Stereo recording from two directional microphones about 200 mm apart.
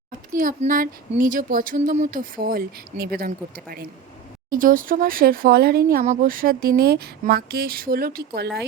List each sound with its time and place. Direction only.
0.3 s speech: 40° right (ahead or behind)